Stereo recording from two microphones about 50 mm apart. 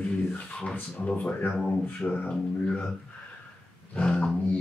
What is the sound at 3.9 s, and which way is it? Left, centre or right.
Dog, centre.